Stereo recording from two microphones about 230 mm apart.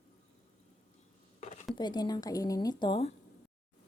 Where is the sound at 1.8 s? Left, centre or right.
Centre.